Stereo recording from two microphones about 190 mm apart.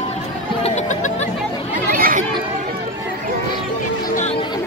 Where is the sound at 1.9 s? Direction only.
45° right (ahead or behind).